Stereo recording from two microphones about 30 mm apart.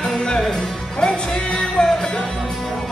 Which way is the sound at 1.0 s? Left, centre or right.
Left.